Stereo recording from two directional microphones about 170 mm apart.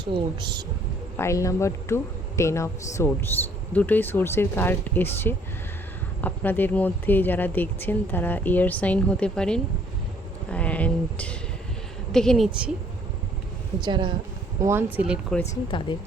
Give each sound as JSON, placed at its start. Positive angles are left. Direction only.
{"t": 0.0, "sound": "speech", "side_deg": -25}
{"t": 1.1, "sound": "a woman's voice", "side_deg": 15}
{"t": 13.8, "sound": "speech", "side_deg": -25}
{"t": 14.6, "sound": "speech", "side_deg": -15}